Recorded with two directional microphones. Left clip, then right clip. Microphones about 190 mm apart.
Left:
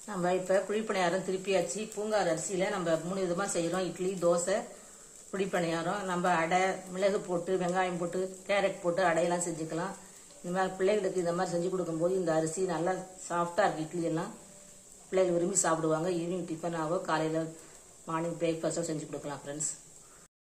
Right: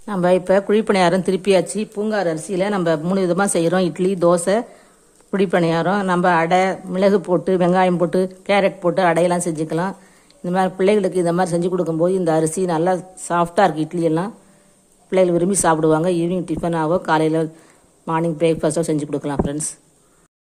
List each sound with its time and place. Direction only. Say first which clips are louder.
0.0 s a woman's voice: right 14 dB; 50° right (ahead or behind)